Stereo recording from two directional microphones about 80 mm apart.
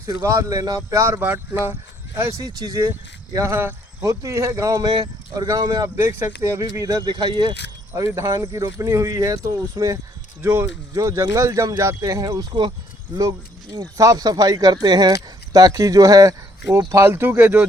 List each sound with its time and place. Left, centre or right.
0.2 s speech: right
1.2 s speech: right
2.1 s speech: right
3.3 s speech: right
4.0 s speech: right
6.0 s speech: right
7.0 s speech: right
7.9 s speech: right
10.4 s speech: right
10.9 s speech: right
15.1 s speech: right
16.9 s speech: right